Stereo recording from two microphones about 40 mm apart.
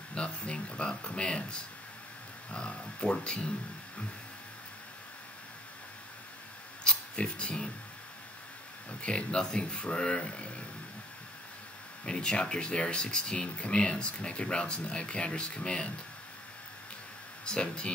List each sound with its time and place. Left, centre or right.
0.1 s speech: left
6.8 s a sound: left
9.0 s speech: left
12.0 s speech: left
17.5 s speech: left